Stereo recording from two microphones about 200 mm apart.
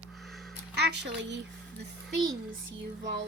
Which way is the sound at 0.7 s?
55° right (ahead or behind).